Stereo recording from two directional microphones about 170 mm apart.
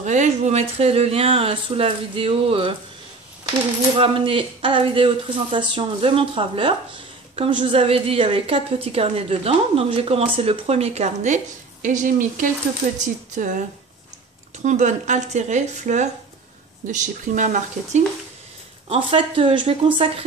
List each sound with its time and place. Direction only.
0.0 s a woman's voice: 45° right (ahead or behind)
4.0 s a woman's voice: 30° right (ahead or behind)
18.9 s a woman's voice: 30° right (ahead or behind)